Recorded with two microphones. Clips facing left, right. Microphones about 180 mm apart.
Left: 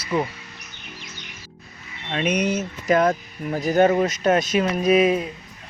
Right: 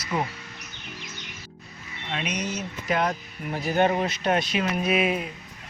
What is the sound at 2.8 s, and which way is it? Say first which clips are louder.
Speech: left 7 dB; 45° left (ahead or behind).